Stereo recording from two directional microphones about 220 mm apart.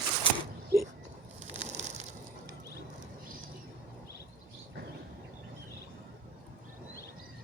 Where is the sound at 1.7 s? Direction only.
30° right (ahead or behind).